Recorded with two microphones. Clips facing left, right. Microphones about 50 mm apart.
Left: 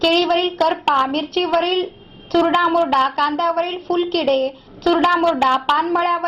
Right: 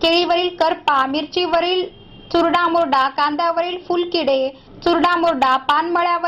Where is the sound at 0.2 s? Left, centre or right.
Centre.